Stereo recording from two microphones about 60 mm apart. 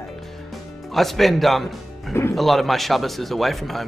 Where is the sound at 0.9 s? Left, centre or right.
Centre.